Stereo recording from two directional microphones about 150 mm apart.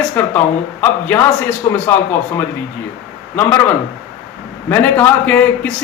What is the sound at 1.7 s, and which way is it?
Speech, 20° left (ahead or behind).